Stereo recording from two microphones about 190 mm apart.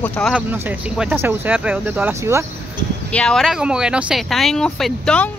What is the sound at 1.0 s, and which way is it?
Speech, 10° right (ahead or behind).